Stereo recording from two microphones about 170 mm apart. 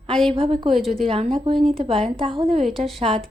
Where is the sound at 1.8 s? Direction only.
35° right (ahead or behind).